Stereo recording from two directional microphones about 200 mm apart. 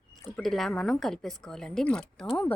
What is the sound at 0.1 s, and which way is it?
A woman's voice, centre (ahead or behind).